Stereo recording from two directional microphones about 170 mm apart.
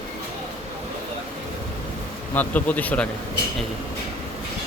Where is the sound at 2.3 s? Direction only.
10° left (ahead or behind).